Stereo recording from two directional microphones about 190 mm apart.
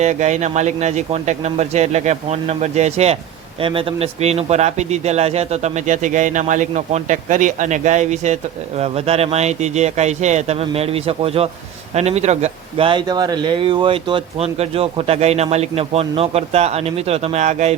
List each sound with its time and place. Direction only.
0.0 s speech: 40° right (ahead or behind)